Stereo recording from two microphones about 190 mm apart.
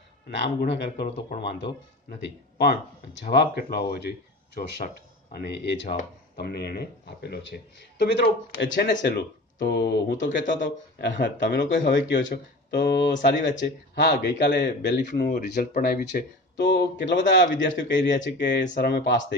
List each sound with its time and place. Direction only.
0.3 s speech: 65° left (ahead or behind)